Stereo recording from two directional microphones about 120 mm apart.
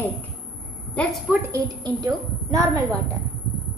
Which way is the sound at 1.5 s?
30° right (ahead or behind).